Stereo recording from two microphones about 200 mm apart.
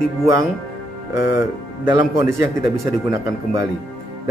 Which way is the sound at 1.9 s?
15° right (ahead or behind).